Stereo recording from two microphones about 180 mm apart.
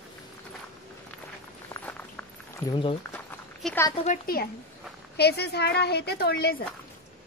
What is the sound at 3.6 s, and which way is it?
Speech, 10° left (ahead or behind).